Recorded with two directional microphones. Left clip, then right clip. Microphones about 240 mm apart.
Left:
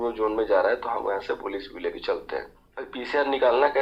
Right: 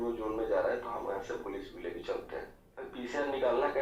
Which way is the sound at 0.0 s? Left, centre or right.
Left.